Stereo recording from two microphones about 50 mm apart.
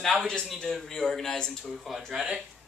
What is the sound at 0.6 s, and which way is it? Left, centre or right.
Speech, centre.